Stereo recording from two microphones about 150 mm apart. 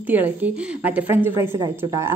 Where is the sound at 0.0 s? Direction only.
10° right (ahead or behind).